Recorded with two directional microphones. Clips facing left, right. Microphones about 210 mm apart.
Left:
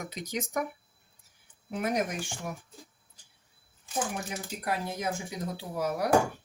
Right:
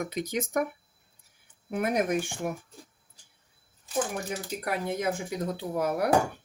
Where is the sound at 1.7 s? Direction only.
55° right (ahead or behind).